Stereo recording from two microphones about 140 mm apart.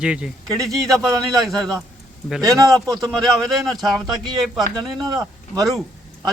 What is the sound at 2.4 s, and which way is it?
Speech, 25° right (ahead or behind).